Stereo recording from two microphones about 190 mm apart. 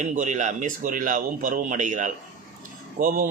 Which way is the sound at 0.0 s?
40° right (ahead or behind).